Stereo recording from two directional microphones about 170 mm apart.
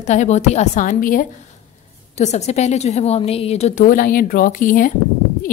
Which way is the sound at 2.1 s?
40° left (ahead or behind).